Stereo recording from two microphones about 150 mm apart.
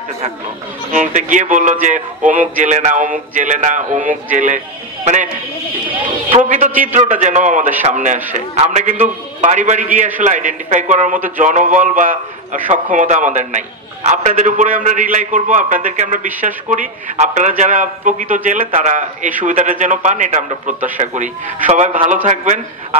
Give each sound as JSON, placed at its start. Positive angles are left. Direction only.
{"t": 0.9, "sound": "a man's voice", "side_deg": -55}
{"t": 6.3, "sound": "a man's voice", "side_deg": -55}